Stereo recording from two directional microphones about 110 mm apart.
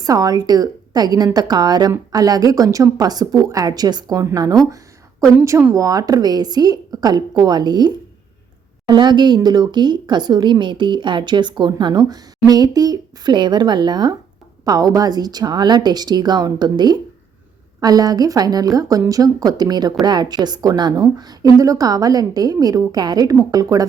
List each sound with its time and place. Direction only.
0.0 s a woman's voice: 35° right (ahead or behind)